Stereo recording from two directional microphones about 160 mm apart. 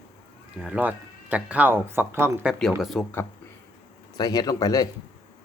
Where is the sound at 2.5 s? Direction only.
5° left (ahead or behind).